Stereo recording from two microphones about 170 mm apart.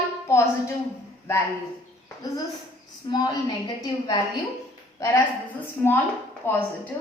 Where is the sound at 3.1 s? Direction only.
25° left (ahead or behind).